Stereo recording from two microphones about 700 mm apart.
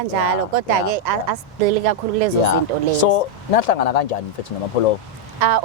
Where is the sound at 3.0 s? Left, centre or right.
Left.